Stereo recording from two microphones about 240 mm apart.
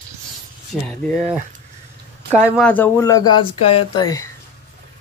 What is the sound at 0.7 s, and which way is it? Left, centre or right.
Speech, centre.